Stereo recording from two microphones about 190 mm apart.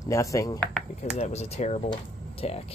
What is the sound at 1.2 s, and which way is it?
Speech, 35° left (ahead or behind).